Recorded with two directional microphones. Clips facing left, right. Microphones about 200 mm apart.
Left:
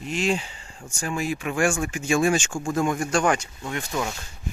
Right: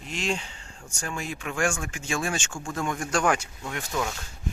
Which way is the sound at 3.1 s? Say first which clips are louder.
Left 2 dB; 5° right (ahead or behind).